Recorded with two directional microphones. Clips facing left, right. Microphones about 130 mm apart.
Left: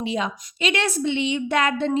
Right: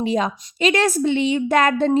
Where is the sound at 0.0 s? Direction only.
40° right (ahead or behind).